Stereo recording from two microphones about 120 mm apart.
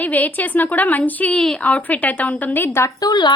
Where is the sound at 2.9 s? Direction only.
35° left (ahead or behind).